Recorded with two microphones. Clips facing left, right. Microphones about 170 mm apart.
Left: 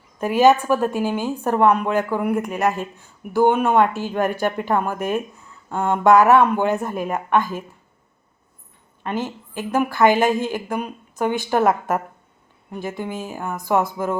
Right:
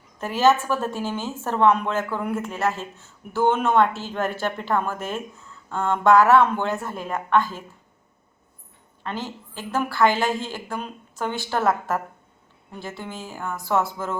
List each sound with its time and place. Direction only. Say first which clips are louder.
0.2 s a woman's voice: left 4 dB; 15° left (ahead or behind)
9.0 s a woman's voice: left 5 dB; 15° left (ahead or behind)